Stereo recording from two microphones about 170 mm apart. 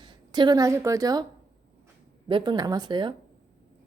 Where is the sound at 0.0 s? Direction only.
25° right (ahead or behind).